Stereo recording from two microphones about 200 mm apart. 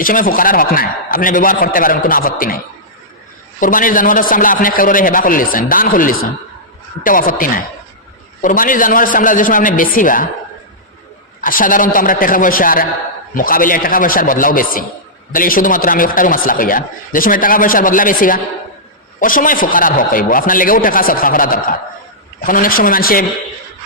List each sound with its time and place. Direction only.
0.0 s a man's voice: 45° left (ahead or behind)
3.6 s a man's voice: 40° left (ahead or behind)
11.3 s a man's voice: 45° left (ahead or behind)